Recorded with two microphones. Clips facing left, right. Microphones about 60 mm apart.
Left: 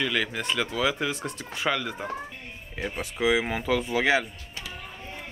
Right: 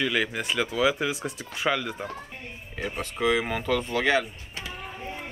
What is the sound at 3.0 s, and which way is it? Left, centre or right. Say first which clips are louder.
Speech: even; centre.